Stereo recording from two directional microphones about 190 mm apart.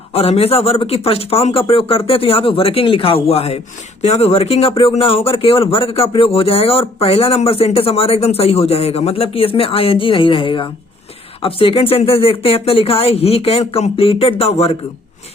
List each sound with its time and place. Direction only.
0.1 s speech: 30° left (ahead or behind)